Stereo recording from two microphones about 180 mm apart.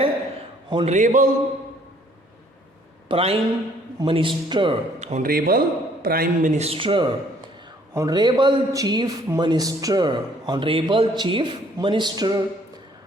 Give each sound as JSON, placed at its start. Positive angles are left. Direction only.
{"t": 0.7, "sound": "a man's voice", "side_deg": -30}
{"t": 0.9, "sound": "speech", "side_deg": -45}
{"t": 3.1, "sound": "a man's voice", "side_deg": -30}
{"t": 5.2, "sound": "a man's voice", "side_deg": -55}
{"t": 6.6, "sound": "a man's voice", "side_deg": -30}